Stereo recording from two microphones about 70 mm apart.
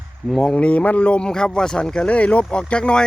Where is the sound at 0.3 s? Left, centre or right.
Centre.